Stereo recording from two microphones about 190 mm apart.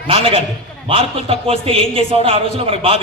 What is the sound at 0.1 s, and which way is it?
A man's voice, 30° right (ahead or behind).